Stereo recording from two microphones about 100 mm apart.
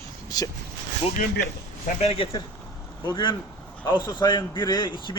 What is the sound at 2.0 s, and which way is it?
Speech, 65° left (ahead or behind).